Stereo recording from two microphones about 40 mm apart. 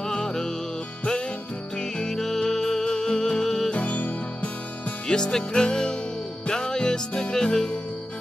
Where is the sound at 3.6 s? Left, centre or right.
Left.